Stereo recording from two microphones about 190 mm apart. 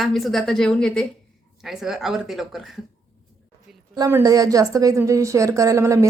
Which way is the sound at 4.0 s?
15° right (ahead or behind).